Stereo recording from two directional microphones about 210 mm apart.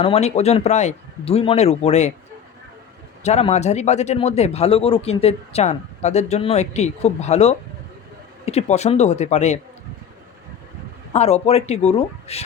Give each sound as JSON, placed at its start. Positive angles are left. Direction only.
{"t": 0.0, "sound": "a man's voice", "side_deg": 30}
{"t": 3.2, "sound": "a man's voice", "side_deg": 30}
{"t": 11.1, "sound": "a man's voice", "side_deg": 30}